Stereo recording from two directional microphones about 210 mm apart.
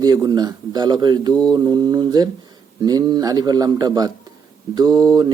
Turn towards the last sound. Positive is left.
turn(degrees=-20)  # may be behind; listen again after turning